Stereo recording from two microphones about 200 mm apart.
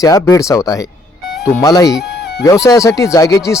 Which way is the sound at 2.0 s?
55° left (ahead or behind).